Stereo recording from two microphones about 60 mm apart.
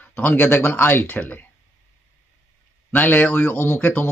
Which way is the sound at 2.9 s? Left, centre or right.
Left.